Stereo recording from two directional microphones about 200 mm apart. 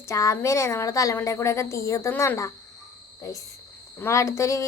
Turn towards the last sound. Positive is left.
turn(degrees=15)  # may be behind; listen again after turning